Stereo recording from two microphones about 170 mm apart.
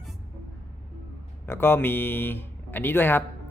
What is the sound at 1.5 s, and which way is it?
Speech, 15° left (ahead or behind).